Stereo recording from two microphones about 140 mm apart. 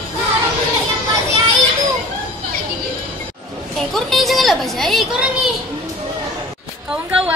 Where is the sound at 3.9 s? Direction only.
Centre (ahead or behind).